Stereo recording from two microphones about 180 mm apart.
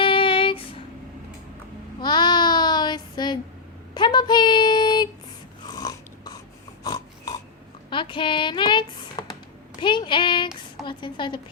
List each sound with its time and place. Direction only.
0.0 s music: 30° left (ahead or behind)
2.0 s child singing: 25° left (ahead or behind)
3.9 s a sound: 25° left (ahead or behind)
6.8 s snort: 20° left (ahead or behind)
7.9 s a sound: 25° left (ahead or behind)
10.8 s a woman's voice: 25° left (ahead or behind)